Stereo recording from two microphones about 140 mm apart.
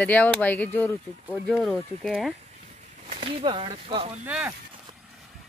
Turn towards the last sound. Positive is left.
turn(degrees=-10)  # may be behind; listen again after turning